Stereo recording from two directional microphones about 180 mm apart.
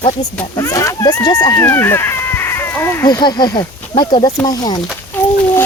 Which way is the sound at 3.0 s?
25° left (ahead or behind).